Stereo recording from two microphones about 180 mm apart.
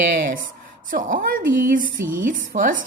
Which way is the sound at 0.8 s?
50° right (ahead or behind).